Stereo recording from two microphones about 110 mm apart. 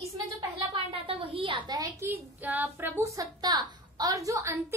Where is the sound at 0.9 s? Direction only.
55° right (ahead or behind).